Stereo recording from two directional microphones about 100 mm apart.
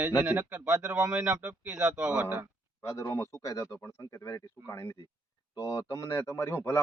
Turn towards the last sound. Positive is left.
turn(degrees=25)  # may be behind; listen again after turning